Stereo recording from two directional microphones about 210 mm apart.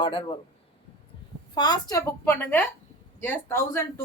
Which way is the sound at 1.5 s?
20° left (ahead or behind).